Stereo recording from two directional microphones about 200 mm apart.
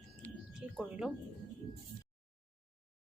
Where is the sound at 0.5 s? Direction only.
Centre (ahead or behind).